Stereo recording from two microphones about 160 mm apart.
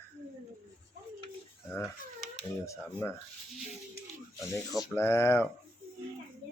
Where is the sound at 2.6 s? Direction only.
15° left (ahead or behind).